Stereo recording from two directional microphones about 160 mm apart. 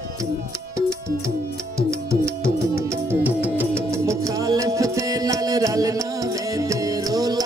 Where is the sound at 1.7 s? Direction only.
20° right (ahead or behind).